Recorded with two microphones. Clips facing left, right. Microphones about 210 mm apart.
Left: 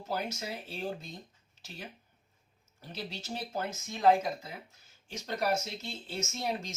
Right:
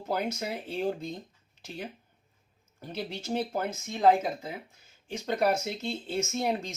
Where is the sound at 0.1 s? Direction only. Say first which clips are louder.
Right 5 dB; 55° right (ahead or behind).